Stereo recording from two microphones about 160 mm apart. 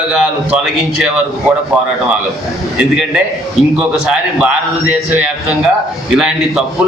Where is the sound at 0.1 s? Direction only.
5° right (ahead or behind).